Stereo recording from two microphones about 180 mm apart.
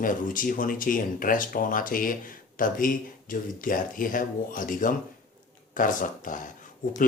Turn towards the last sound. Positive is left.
turn(degrees=45)  # may be behind; listen again after turning